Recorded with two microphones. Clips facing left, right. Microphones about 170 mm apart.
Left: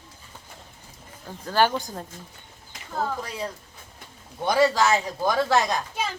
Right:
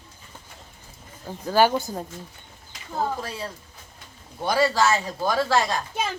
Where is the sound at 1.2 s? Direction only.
10° right (ahead or behind).